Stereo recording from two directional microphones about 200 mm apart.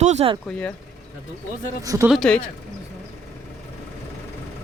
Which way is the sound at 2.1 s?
5° left (ahead or behind).